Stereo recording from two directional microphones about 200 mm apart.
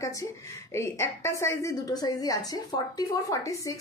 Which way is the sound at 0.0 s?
15° left (ahead or behind).